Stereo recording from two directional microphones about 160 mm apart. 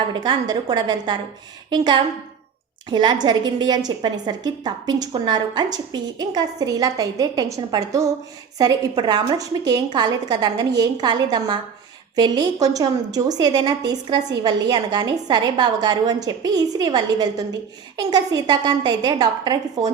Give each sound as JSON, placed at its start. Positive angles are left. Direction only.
{"t": 0.1, "sound": "a woman's voice", "side_deg": -25}